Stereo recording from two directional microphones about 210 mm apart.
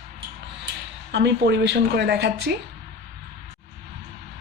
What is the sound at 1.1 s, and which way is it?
Speech, 55° right (ahead or behind).